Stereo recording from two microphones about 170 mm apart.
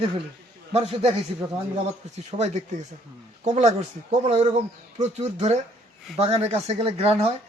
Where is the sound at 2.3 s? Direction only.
30° right (ahead or behind).